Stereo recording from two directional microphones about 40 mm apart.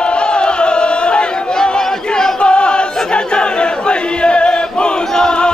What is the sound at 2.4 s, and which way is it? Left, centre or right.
Chant, left.